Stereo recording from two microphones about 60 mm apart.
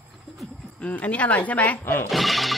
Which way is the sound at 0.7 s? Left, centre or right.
Left.